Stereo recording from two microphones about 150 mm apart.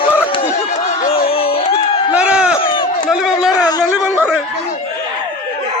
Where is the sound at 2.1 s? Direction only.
5° right (ahead or behind).